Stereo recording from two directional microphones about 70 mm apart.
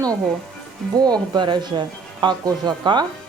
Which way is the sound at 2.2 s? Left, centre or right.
Right.